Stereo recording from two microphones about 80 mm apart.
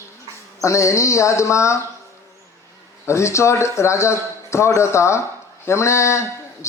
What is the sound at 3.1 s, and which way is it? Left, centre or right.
A man's voice, left.